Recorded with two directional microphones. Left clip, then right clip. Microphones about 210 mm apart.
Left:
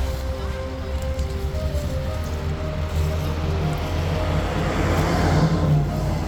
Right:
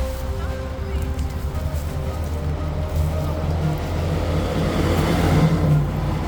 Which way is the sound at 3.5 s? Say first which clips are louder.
Even; 60° right (ahead or behind).